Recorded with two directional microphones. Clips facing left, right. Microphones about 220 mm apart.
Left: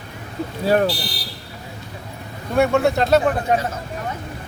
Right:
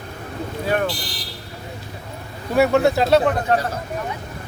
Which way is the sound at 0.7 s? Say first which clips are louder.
Left 4 dB; 35° left (ahead or behind).